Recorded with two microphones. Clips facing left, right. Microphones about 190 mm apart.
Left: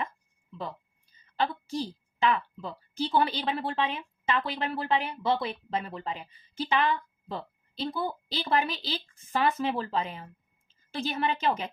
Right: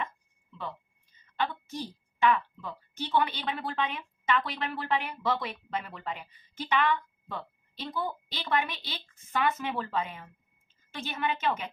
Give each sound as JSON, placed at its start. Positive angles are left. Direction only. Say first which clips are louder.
{"t": 1.3, "sound": "a woman's voice", "louder": "left 3 dB", "side_deg": 35}